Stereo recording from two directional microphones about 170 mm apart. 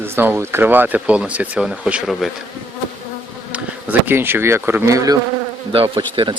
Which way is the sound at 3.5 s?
10° right (ahead or behind).